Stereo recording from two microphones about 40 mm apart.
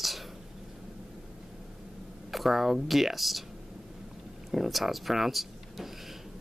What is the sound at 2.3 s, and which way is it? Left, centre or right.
Speech, centre.